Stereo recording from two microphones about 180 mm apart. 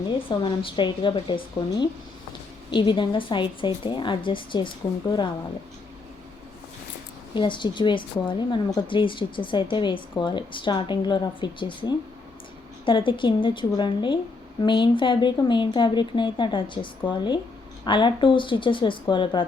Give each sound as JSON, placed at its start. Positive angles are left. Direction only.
{"t": 0.3, "sound": "speech", "side_deg": 30}
{"t": 7.3, "sound": "speech", "side_deg": 25}